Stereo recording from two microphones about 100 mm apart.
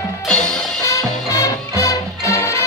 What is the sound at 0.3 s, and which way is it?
Music, 5° left (ahead or behind).